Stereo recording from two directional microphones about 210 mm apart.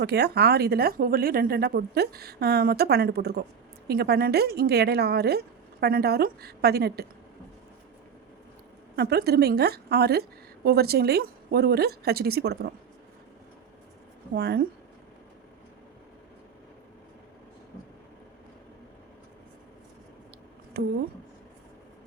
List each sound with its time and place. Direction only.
0.0 s a woman's voice: 50° right (ahead or behind)
9.0 s a woman's voice: 50° right (ahead or behind)
14.3 s a woman's voice: 50° right (ahead or behind)
20.7 s a woman's voice: 50° right (ahead or behind)